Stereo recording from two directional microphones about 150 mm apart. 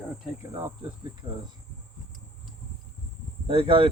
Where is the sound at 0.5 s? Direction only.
25° right (ahead or behind).